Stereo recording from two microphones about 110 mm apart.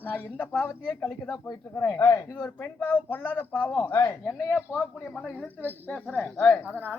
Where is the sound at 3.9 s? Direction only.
35° left (ahead or behind).